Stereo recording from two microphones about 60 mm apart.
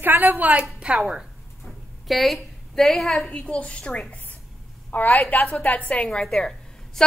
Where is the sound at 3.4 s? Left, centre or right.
Centre.